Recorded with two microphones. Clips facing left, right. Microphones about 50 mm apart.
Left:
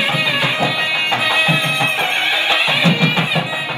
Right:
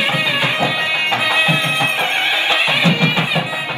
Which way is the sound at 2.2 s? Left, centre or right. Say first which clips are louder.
Even; right.